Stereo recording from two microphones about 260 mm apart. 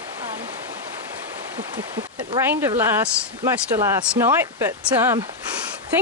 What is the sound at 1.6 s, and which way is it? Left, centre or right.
Speech, centre.